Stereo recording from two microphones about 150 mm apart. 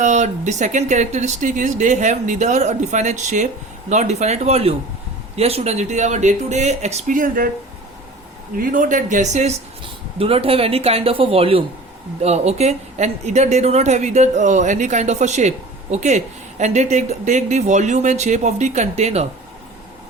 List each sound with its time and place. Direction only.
0.0 s speech: 50° right (ahead or behind); by 7.5 s 70° right (ahead or behind)
8.5 s speech: 65° right (ahead or behind)
9.8 s speech: 40° right (ahead or behind)